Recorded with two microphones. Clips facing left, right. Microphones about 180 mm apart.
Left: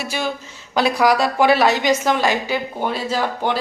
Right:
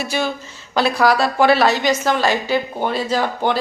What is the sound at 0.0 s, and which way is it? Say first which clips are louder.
A woman's voice: right 2 dB; 10° left (ahead or behind).